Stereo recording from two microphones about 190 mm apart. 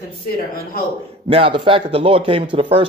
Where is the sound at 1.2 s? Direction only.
30° right (ahead or behind).